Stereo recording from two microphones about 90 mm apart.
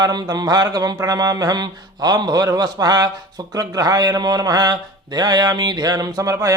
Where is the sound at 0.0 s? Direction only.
45° right (ahead or behind).